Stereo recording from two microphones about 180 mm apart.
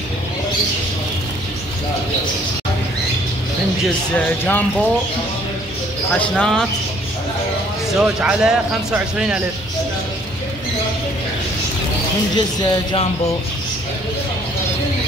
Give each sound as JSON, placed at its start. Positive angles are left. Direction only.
{"t": 4.5, "sound": "speech", "side_deg": 10}
{"t": 6.1, "sound": "speech", "side_deg": 5}
{"t": 8.0, "sound": "speech", "side_deg": -5}
{"t": 12.4, "sound": "speech", "side_deg": 25}